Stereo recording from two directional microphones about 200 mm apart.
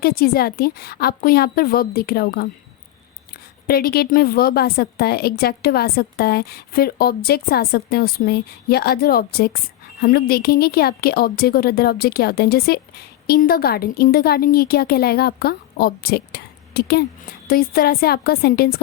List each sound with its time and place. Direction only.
0.0 s a woman's voice: 50° left (ahead or behind)
3.7 s a woman's voice: 50° left (ahead or behind)